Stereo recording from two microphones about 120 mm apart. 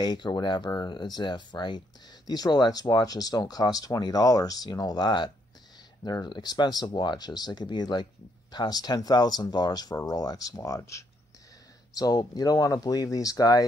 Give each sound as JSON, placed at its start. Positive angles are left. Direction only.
{"t": 0.0, "sound": "speech", "side_deg": 35}